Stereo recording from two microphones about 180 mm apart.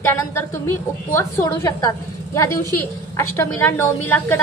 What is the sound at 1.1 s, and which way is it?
Speech, 15° left (ahead or behind).